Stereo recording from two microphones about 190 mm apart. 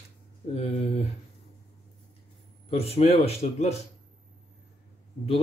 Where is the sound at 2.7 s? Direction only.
30° left (ahead or behind).